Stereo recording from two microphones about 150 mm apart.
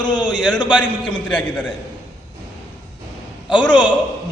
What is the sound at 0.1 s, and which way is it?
Speech, 30° left (ahead or behind).